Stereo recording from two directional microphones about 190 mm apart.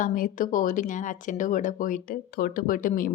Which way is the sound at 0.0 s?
45° left (ahead or behind).